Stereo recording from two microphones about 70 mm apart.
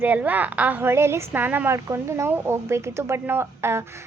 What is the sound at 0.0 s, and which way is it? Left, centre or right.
A woman's voice, right.